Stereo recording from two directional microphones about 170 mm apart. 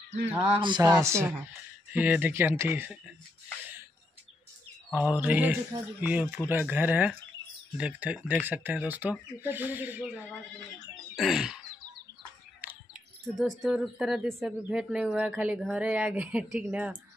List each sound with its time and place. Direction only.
0.6 s a sound: 25° right (ahead or behind)
0.9 s speech: 15° right (ahead or behind)
4.9 s speech: 10° right (ahead or behind)
11.1 s speech: 5° right (ahead or behind)
12.6 s bird: 10° right (ahead or behind)
13.4 s speech: centre (ahead or behind)